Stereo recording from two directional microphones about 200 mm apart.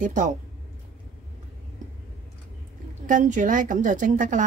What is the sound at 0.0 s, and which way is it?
Speech, 40° right (ahead or behind).